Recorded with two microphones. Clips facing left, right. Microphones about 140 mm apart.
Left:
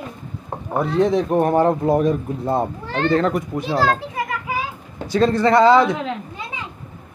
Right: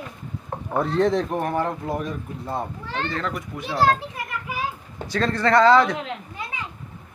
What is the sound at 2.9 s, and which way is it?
Speech, 55° left (ahead or behind).